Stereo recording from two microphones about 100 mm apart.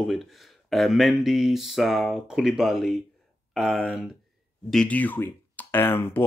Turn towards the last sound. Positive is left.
turn(degrees=20)  # may be behind; listen again after turning